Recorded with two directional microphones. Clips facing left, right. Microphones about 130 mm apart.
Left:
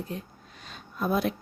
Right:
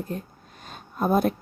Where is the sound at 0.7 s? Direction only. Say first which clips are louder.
Right 5 dB; 45° right (ahead or behind).